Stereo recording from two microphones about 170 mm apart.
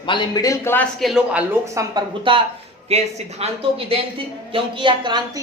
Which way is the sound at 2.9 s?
40° right (ahead or behind).